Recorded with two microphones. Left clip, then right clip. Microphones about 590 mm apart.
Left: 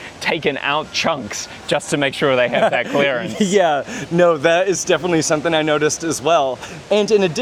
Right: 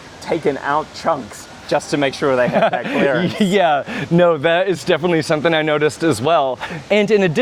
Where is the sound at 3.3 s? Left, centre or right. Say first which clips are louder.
Right 1 dB; centre; by 6.5 s right.